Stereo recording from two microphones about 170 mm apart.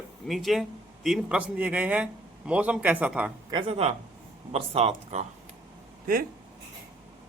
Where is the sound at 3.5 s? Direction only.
35° right (ahead or behind).